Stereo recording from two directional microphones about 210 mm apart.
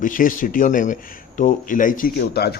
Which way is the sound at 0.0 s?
40° left (ahead or behind).